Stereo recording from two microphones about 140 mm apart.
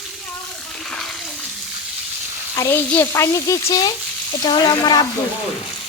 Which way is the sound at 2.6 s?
15° left (ahead or behind).